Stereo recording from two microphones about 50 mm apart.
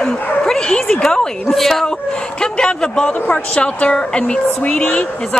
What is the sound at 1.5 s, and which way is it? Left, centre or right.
Speech, centre.